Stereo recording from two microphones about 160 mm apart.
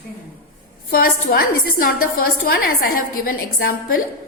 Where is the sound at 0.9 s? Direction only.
70° left (ahead or behind).